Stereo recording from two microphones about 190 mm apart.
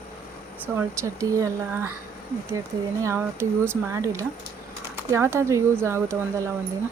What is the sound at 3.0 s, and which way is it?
Speech, 15° right (ahead or behind).